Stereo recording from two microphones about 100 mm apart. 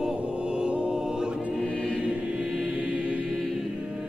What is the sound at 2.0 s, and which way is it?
Choir, 15° right (ahead or behind).